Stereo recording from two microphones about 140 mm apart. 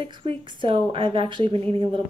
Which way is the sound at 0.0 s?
35° right (ahead or behind).